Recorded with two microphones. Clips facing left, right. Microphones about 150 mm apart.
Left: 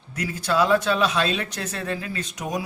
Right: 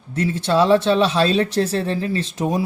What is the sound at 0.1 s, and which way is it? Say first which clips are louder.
Speech: right 6 dB; 30° right (ahead or behind).